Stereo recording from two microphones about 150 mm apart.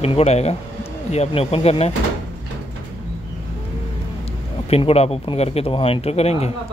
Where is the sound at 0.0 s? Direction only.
45° left (ahead or behind).